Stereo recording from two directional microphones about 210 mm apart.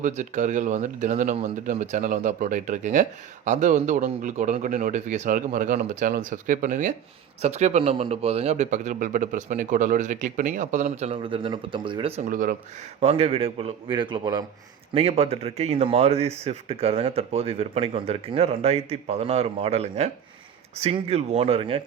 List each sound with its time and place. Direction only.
0.0 s speech: 35° right (ahead or behind)
12.3 s speech: 40° right (ahead or behind)
13.0 s speech: 30° right (ahead or behind)